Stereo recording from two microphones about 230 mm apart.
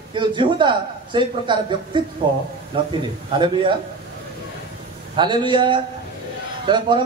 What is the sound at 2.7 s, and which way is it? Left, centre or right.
Speech, right.